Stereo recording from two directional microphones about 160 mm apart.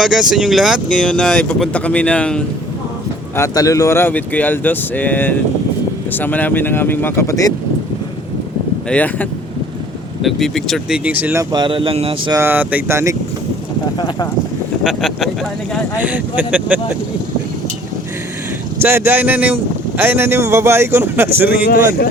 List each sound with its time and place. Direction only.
0.0 s speech: 5° right (ahead or behind)
3.3 s speech: 20° left (ahead or behind)
8.9 s speech: 10° left (ahead or behind)
10.2 s speech: centre (ahead or behind)
11.5 s speech: 30° right (ahead or behind)
12.3 s speech: 15° right (ahead or behind)
14.8 s speech: centre (ahead or behind)
18.8 s speech: 15° right (ahead or behind)
21.5 s speech: 75° left (ahead or behind)